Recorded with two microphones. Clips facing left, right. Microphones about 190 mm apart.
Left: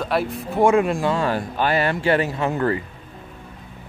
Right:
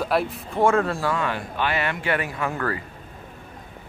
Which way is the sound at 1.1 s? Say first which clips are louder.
Left 4 dB; 35° left (ahead or behind).